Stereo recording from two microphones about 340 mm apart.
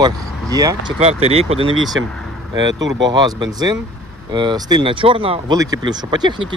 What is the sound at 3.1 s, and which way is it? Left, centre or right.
Speech, centre.